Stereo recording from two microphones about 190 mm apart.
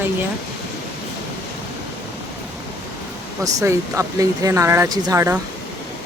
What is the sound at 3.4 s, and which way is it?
Speech, 15° right (ahead or behind).